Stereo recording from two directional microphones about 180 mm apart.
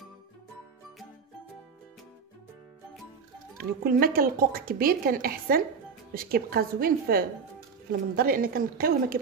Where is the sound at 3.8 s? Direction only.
55° right (ahead or behind).